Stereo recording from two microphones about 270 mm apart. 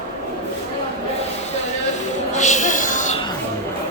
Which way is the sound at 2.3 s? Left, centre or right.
Left.